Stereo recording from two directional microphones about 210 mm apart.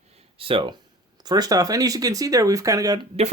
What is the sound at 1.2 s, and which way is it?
Speech, 20° right (ahead or behind).